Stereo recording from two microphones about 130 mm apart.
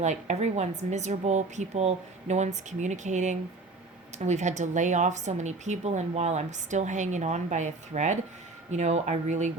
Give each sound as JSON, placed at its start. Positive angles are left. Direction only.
{"t": 0.0, "sound": "speech", "side_deg": -65}